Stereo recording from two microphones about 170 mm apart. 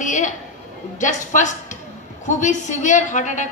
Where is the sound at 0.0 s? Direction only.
45° left (ahead or behind).